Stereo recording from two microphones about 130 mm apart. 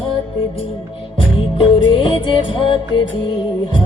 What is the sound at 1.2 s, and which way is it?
Music, 45° left (ahead or behind).